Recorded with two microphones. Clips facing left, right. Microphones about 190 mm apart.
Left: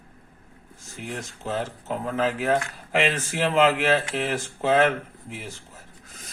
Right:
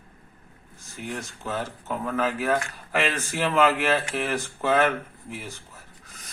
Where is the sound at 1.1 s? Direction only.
25° left (ahead or behind).